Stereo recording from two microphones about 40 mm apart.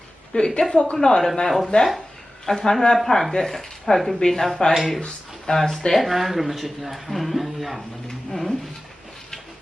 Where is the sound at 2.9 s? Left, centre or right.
Centre.